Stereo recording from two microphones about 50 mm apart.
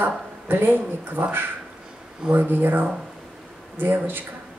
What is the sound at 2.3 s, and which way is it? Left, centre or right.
Speech, right.